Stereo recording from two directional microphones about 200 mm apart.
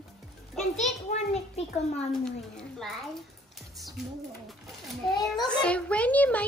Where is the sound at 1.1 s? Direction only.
30° left (ahead or behind).